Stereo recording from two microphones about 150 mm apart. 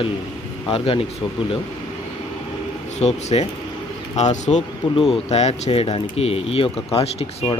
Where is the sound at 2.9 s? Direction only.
45° left (ahead or behind).